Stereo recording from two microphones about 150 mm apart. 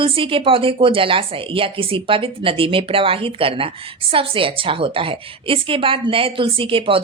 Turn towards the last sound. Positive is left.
turn(degrees=-35)  # may be behind; listen again after turning